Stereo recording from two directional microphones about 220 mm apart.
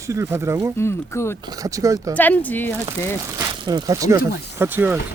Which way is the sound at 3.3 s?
20° right (ahead or behind).